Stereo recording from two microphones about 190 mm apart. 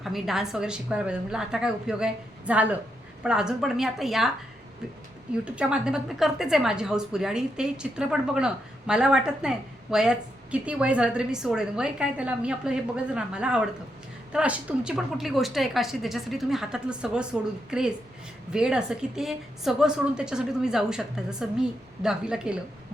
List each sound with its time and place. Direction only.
0.0 s a woman's voice: centre (ahead or behind)
5.5 s a woman's voice: 5° right (ahead or behind)